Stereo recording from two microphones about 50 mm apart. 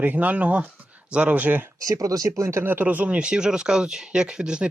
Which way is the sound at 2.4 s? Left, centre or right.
Right.